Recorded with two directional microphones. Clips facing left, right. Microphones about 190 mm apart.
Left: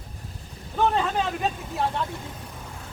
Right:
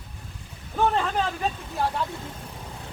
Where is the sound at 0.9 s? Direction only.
Centre (ahead or behind).